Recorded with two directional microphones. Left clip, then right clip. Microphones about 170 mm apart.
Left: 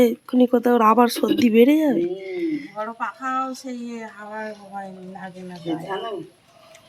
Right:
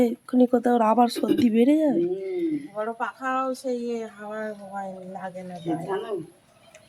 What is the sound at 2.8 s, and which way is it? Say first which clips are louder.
Speech: even; 20° right (ahead or behind).